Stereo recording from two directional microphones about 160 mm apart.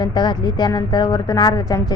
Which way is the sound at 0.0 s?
30° left (ahead or behind).